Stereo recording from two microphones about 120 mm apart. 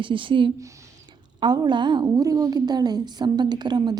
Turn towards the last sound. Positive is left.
turn(degrees=-35)  # may be behind; listen again after turning